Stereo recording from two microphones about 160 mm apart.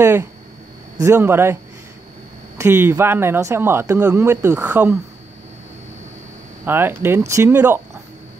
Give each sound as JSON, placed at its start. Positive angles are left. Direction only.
{"t": 0.0, "sound": "speech", "side_deg": -15}
{"t": 6.6, "sound": "speech", "side_deg": -15}